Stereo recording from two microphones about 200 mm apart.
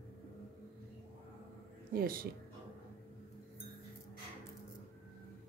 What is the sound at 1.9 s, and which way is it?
Speech, 45° right (ahead or behind).